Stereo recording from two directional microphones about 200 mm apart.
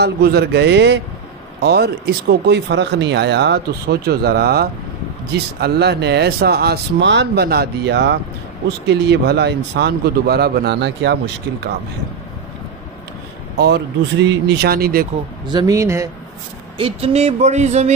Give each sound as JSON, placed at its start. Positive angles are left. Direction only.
{"t": 0.0, "sound": "speech", "side_deg": -55}
{"t": 13.6, "sound": "speech", "side_deg": -60}
{"t": 15.4, "sound": "speech", "side_deg": -20}
{"t": 16.7, "sound": "speech", "side_deg": -30}